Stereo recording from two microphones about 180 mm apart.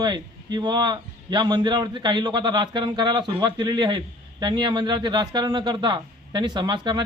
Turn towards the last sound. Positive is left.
turn(degrees=-25)  # may be behind; listen again after turning